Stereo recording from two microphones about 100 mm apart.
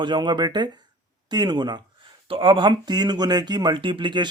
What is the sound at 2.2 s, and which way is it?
Speech, 65° right (ahead or behind).